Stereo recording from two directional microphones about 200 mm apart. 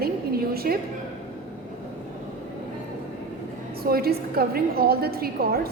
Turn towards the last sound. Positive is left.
turn(degrees=-50)  # may be behind; listen again after turning